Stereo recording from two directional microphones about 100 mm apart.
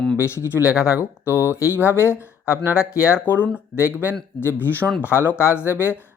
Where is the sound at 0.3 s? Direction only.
30° left (ahead or behind).